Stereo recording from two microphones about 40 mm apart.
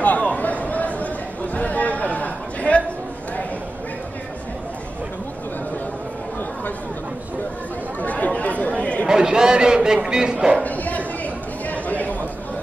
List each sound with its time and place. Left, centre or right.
0.2 s chatter: left
8.0 s chatter: left
9.0 s a sound: centre
10.0 s speech: centre
10.3 s speech: right
10.6 s chatter: left